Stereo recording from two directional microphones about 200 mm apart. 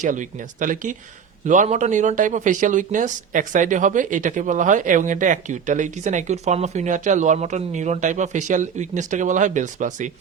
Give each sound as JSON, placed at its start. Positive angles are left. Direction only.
{"t": 0.0, "sound": "speech", "side_deg": -40}